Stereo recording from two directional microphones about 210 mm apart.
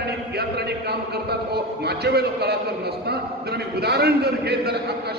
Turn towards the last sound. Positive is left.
turn(degrees=-50)  # may be behind; listen again after turning